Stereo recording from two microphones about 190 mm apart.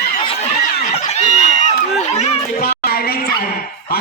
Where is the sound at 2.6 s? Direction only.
55° left (ahead or behind).